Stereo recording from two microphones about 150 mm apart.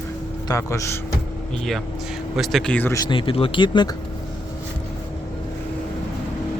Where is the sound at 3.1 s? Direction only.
35° left (ahead or behind).